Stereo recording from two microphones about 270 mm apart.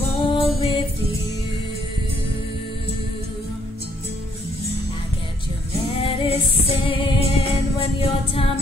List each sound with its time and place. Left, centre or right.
0.3 s music: centre
6.0 s music: left